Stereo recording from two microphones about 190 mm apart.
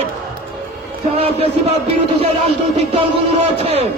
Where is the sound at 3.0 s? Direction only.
35° right (ahead or behind).